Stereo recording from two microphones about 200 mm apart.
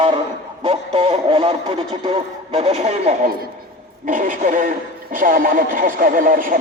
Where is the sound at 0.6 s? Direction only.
30° right (ahead or behind).